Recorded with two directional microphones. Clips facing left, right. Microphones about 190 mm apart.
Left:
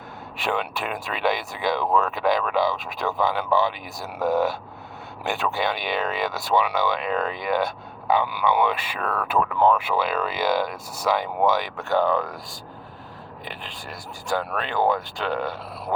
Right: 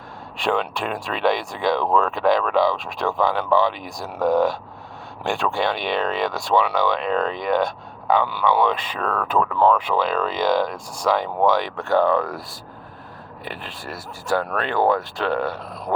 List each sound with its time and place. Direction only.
0.3 s speech: 5° left (ahead or behind)
13.4 s speech: centre (ahead or behind)